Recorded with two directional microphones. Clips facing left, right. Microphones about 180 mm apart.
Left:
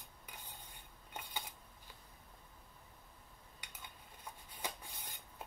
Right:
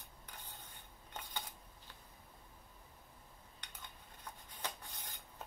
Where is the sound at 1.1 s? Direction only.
10° left (ahead or behind).